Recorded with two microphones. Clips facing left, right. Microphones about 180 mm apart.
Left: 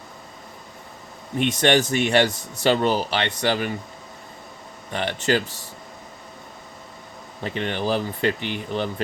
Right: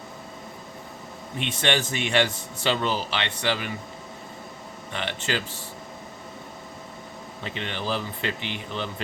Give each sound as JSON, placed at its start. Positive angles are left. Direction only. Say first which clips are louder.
{"t": 1.4, "sound": "speech", "louder": "left 7 dB", "side_deg": 45}
{"t": 4.9, "sound": "speech", "louder": "left 7 dB", "side_deg": 40}
{"t": 7.4, "sound": "speech", "louder": "left 6 dB", "side_deg": 45}